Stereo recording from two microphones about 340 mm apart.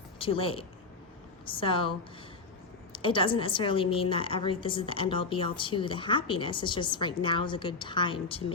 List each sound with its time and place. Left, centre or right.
0.2 s a woman's voice: centre
2.9 s a woman's voice: centre